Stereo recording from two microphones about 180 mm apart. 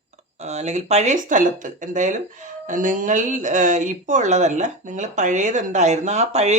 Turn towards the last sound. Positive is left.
turn(degrees=-40)  # may be behind; listen again after turning